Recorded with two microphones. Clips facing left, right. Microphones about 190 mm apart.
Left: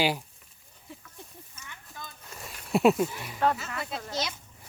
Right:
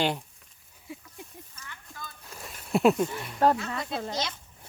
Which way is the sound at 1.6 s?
15° left (ahead or behind).